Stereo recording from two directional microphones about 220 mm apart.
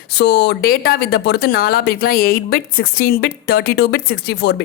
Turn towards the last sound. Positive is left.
turn(degrees=50)  # may be behind; listen again after turning